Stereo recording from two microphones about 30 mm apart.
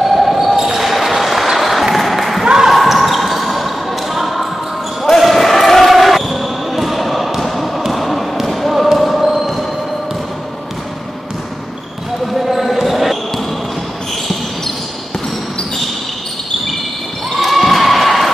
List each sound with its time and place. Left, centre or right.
0.0 s basketball bounce: centre
2.0 s applause: centre
2.4 s basketball bounce: right
2.7 s basketball bounce: centre
12.4 s basketball bounce: centre
17.4 s basketball bounce: centre